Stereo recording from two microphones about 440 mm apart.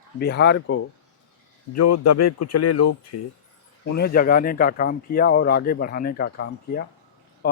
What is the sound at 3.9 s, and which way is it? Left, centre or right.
A man's voice, centre.